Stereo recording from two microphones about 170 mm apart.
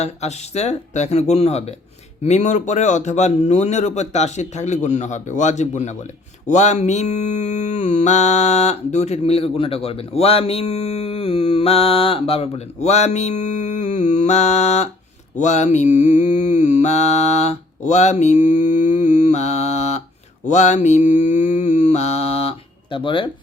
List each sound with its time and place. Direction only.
0.0 s mantra: 40° left (ahead or behind)